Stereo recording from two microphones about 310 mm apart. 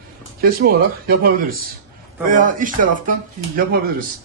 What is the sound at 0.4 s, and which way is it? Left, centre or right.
A man's voice, right.